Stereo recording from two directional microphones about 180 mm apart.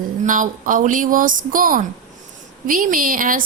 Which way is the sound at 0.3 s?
45° right (ahead or behind).